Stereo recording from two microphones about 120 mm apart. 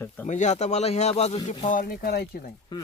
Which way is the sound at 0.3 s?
85° left.